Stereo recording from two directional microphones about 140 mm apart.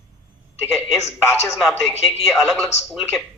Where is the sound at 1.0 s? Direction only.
15° left (ahead or behind).